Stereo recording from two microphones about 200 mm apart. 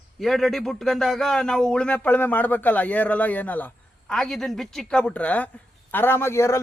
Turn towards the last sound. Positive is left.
turn(degrees=15)  # may be behind; listen again after turning